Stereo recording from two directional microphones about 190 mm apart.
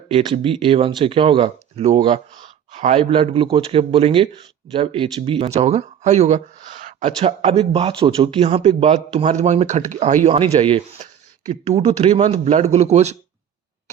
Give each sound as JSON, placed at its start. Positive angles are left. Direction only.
{"t": 0.1, "sound": "speech", "side_deg": -30}